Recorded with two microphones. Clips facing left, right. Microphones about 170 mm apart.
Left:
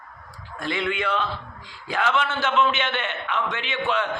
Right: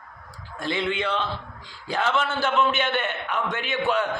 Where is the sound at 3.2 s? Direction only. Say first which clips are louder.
Even; 45° right (ahead or behind).